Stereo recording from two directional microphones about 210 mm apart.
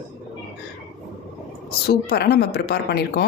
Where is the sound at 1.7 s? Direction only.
50° left (ahead or behind).